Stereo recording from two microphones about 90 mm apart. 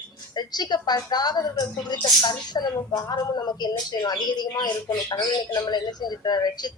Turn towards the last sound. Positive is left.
turn(degrees=50)  # may be behind; listen again after turning